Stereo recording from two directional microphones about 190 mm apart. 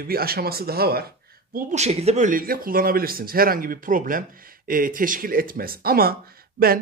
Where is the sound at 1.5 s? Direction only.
40° right (ahead or behind).